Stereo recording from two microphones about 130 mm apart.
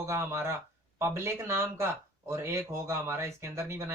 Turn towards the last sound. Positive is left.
turn(degrees=-20)  # may be behind; listen again after turning